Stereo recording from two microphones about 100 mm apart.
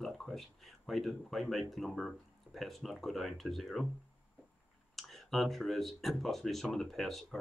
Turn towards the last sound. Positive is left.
turn(degrees=5)  # may be behind; listen again after turning